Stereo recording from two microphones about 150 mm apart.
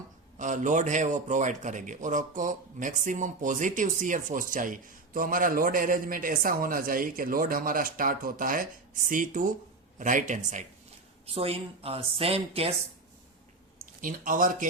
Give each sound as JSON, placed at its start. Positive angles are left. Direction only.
{"t": 0.3, "sound": "a man's voice", "side_deg": -55}
{"t": 11.3, "sound": "speech", "side_deg": -40}
{"t": 14.0, "sound": "speech", "side_deg": -65}